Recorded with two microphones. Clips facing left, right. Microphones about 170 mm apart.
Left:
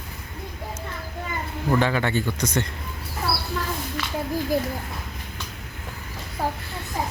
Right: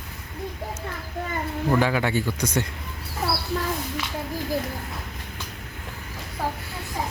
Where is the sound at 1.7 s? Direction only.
5° right (ahead or behind).